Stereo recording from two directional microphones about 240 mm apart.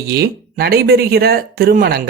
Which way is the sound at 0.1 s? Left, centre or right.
Right.